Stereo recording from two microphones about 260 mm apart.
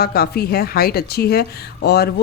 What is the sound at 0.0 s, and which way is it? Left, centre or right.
A woman's voice, left.